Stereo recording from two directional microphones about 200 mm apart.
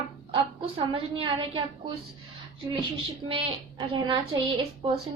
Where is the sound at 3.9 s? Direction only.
25° right (ahead or behind).